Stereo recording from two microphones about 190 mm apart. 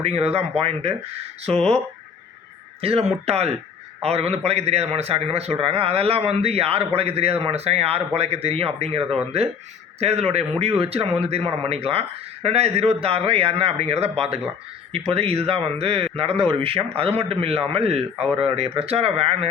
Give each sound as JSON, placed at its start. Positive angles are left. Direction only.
{"t": 0.0, "sound": "a man's voice", "side_deg": -35}
{"t": 2.8, "sound": "a man's voice", "side_deg": -30}